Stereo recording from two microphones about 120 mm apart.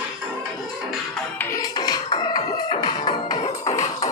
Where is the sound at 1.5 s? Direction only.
35° left (ahead or behind).